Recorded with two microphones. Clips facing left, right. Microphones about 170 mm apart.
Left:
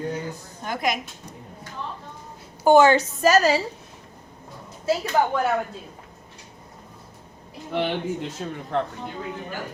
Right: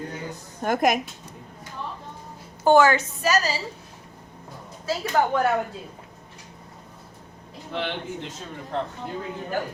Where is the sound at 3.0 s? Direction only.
50° left (ahead or behind).